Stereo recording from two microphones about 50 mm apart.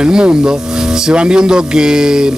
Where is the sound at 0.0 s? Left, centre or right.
Centre.